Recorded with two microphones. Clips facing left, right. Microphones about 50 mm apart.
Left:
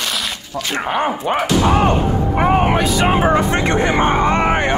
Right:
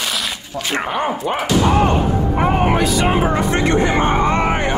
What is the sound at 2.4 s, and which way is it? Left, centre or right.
A man's voice, left.